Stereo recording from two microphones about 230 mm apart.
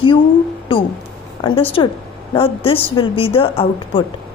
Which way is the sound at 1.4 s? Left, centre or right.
Left.